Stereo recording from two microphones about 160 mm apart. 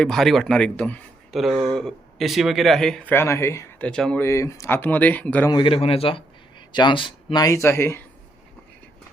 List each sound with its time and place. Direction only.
0.0 s speech: centre (ahead or behind)
4.2 s speech: 15° left (ahead or behind)
5.5 s speech: 30° left (ahead or behind)